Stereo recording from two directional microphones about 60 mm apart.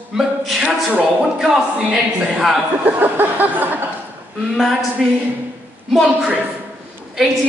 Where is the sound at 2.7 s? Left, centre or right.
Right.